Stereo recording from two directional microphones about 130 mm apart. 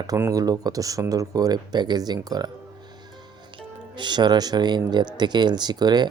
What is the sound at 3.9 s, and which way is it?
Speech, 35° right (ahead or behind).